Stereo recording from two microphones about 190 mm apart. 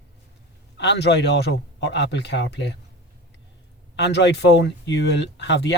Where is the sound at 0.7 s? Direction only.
65° left (ahead or behind).